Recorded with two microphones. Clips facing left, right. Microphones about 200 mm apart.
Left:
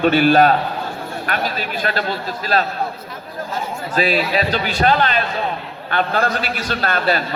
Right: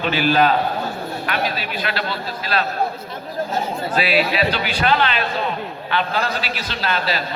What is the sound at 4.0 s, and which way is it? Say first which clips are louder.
A man's voice: left 2 dB; 40° left (ahead or behind).